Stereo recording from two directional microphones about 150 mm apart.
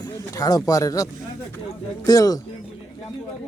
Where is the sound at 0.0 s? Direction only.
25° left (ahead or behind).